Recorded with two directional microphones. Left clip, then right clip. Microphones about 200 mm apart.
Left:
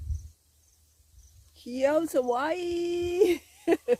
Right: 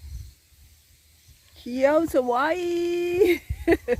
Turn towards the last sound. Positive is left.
turn(degrees=0)  # may be behind; listen again after turning